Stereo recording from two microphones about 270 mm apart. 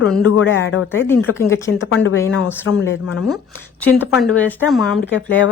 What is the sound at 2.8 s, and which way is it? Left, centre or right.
Speech, left.